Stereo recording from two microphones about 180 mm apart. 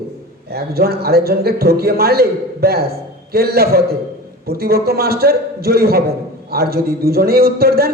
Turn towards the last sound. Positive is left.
turn(degrees=-60)  # may be behind; listen again after turning